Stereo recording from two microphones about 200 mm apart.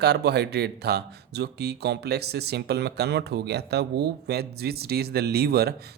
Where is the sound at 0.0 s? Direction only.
55° right (ahead or behind).